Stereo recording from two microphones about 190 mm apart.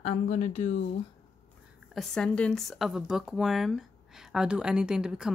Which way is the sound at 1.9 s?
Centre (ahead or behind).